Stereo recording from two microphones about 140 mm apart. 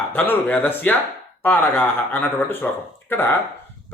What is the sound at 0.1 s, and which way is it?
Speech, 10° left (ahead or behind).